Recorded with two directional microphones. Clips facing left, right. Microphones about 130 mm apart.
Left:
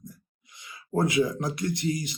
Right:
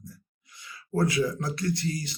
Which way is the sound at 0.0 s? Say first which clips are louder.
Left 1 dB; 20° left (ahead or behind).